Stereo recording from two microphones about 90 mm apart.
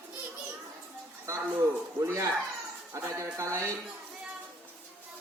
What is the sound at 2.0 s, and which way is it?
Speech, 35° right (ahead or behind).